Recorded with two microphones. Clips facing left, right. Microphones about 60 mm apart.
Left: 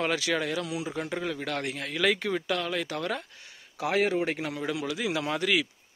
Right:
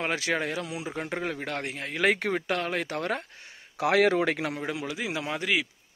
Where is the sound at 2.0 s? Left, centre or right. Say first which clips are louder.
Right 2 dB; right.